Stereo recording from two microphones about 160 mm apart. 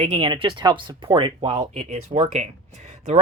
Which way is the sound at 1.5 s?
45° right (ahead or behind).